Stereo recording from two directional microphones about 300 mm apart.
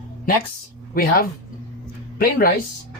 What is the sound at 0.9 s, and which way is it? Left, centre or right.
Speech, left.